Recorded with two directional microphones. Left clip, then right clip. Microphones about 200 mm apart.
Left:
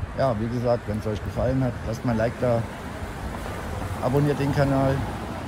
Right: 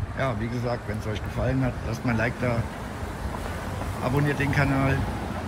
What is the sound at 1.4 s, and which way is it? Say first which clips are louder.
Speech: left 4 dB; 30° left (ahead or behind).